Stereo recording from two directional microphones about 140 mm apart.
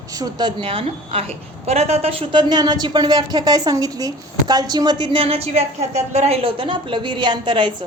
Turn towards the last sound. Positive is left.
turn(degrees=-35)  # may be behind; listen again after turning